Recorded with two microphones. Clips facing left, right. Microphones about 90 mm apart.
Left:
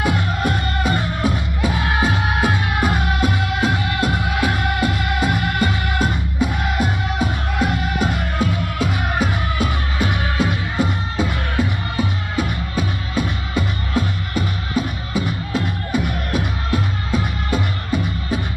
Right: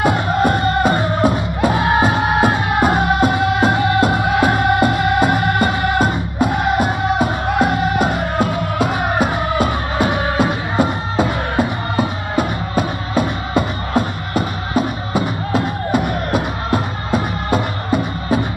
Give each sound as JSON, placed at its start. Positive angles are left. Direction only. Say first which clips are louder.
{"t": 0.3, "sound": "music", "louder": "right 7 dB", "side_deg": -45}
{"t": 4.2, "sound": "music", "louder": "right 6 dB", "side_deg": -45}
{"t": 8.4, "sound": "music", "louder": "right 4 dB", "side_deg": -50}